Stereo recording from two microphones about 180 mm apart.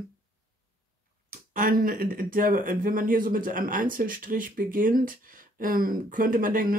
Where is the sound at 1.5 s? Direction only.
50° right (ahead or behind).